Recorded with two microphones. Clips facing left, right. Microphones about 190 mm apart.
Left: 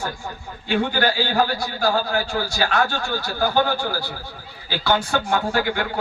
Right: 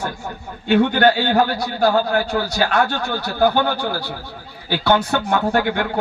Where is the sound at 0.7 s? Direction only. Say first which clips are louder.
Right 6 dB; 60° right (ahead or behind).